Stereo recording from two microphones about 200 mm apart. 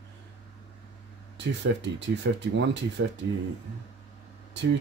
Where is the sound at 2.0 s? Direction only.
60° right (ahead or behind).